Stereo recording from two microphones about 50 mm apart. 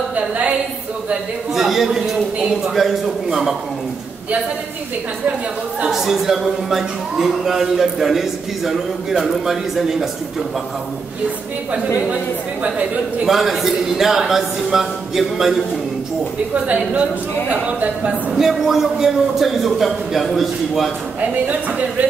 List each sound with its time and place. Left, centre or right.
0.1 s a sound: right
1.5 s a man's voice: centre
5.9 s a man's voice: centre
13.2 s a man's voice: centre
16.6 s a woman's voice: right
18.3 s a man's voice: centre
21.2 s a woman's voice: right